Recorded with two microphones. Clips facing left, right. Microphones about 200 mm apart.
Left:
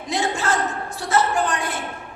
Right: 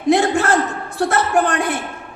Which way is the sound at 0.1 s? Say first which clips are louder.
Right 8 dB; 55° right (ahead or behind).